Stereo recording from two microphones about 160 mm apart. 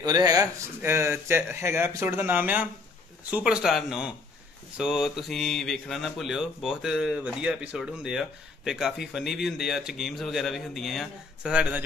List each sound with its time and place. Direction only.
0.0 s speech: 25° right (ahead or behind); by 11.8 s 10° right (ahead or behind)